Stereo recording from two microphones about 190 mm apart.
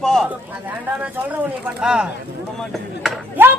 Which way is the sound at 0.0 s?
5° left (ahead or behind).